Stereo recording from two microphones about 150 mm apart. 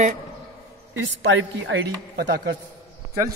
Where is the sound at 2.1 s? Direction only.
90° right.